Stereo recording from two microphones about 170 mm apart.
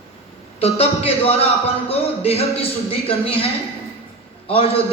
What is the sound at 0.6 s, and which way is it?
A man's voice, 35° left (ahead or behind).